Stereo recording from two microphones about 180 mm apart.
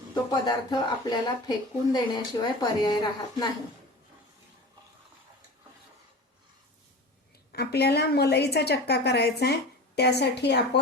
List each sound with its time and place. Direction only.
0.1 s speech: 25° left (ahead or behind)
7.5 s a woman's voice: 65° left (ahead or behind)